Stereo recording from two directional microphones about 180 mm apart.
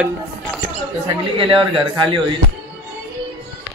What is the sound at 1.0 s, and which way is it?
Speech, 30° right (ahead or behind).